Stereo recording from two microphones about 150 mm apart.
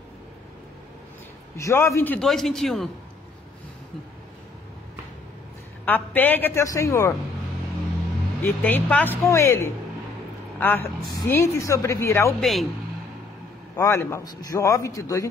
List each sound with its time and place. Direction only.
1.6 s a man's voice: 20° left (ahead or behind)
2.1 s speech: centre (ahead or behind)
5.9 s a woman's voice: 10° left (ahead or behind)
8.4 s a woman's voice: 10° left (ahead or behind)
12.4 s speech: centre (ahead or behind)
13.7 s a man's voice: 20° left (ahead or behind)